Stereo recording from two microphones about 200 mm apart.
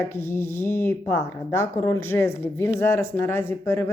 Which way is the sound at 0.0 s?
10° left (ahead or behind).